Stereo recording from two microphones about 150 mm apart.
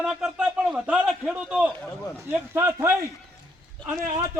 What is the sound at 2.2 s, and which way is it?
A man's voice, 15° right (ahead or behind).